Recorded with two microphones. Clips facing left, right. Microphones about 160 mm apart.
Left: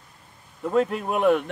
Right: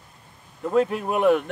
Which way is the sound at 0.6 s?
Centre (ahead or behind).